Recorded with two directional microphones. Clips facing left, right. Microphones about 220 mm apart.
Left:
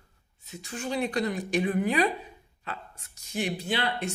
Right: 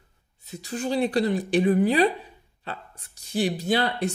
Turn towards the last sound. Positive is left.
turn(degrees=-40)  # may be behind; listen again after turning